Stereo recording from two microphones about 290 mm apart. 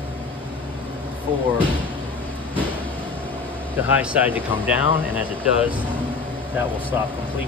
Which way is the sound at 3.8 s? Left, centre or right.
Centre.